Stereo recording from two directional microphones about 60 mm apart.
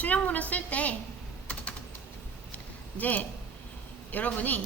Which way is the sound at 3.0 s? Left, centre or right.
Left.